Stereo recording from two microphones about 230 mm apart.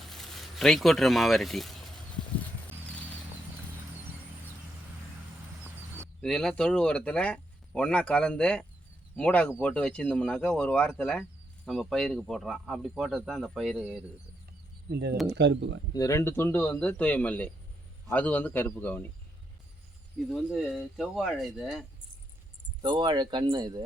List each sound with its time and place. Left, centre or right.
0.1 s speech: centre
6.2 s speech: centre
14.8 s speech: right
15.9 s a man's voice: centre
20.3 s speech: centre
22.8 s speech: centre